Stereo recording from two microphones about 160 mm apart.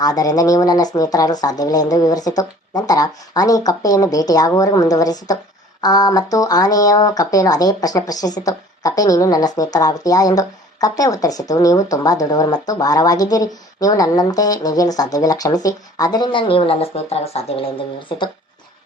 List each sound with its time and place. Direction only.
0.0 s speech: 25° left (ahead or behind)